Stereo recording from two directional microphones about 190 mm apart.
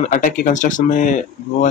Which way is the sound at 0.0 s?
40° left (ahead or behind).